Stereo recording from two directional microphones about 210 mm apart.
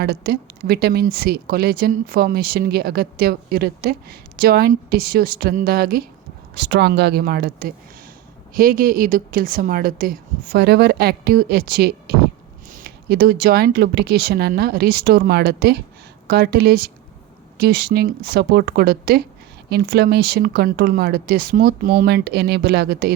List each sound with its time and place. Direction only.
0.0 s speech: 45° right (ahead or behind)